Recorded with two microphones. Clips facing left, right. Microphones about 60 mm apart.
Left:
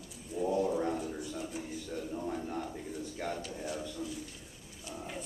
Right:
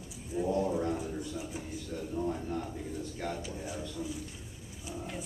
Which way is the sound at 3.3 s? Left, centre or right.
Centre.